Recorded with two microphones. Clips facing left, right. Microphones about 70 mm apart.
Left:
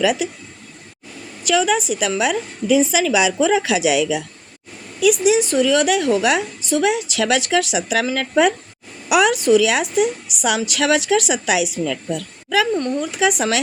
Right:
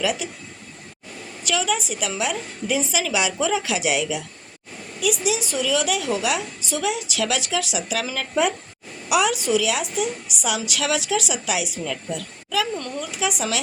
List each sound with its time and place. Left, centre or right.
0.0 s a woman's voice: left
1.5 s a woman's voice: left
5.2 s a woman's voice: left